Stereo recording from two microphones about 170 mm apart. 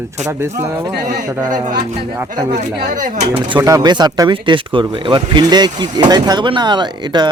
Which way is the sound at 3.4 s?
25° right (ahead or behind).